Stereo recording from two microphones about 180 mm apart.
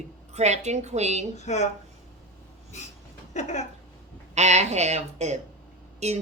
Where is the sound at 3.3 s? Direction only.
40° left (ahead or behind).